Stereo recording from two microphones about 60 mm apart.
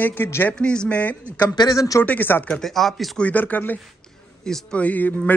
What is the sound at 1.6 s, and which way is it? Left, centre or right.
Speech, left.